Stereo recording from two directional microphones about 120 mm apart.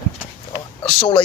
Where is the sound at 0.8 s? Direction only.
45° left (ahead or behind).